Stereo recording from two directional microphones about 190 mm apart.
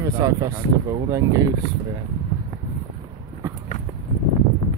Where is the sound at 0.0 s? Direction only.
20° right (ahead or behind).